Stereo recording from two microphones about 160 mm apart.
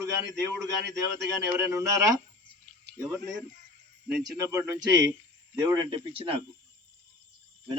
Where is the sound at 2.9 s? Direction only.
90° right.